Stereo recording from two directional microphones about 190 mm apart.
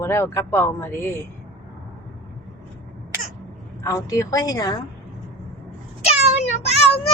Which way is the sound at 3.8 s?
15° left (ahead or behind).